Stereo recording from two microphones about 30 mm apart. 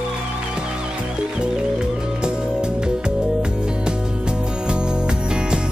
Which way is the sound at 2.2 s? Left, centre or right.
Right.